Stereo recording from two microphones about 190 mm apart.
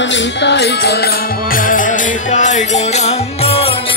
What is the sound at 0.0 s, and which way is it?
Music, 70° left (ahead or behind).